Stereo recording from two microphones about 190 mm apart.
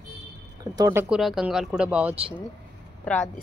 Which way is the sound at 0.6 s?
20° right (ahead or behind).